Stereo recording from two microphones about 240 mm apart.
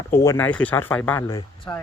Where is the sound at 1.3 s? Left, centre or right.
Left.